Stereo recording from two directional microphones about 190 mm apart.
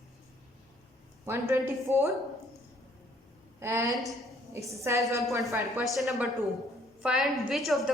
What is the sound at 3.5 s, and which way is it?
A woman's voice, 15° right (ahead or behind).